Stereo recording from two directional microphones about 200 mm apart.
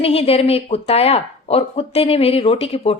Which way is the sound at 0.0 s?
30° left (ahead or behind).